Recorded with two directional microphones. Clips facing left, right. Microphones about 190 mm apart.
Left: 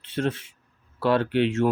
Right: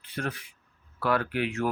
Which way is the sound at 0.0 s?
25° left (ahead or behind).